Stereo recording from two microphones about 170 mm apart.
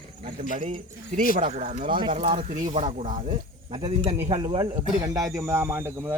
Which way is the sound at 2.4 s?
50° right (ahead or behind).